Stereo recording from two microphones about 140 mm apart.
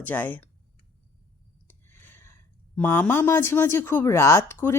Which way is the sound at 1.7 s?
15° left (ahead or behind).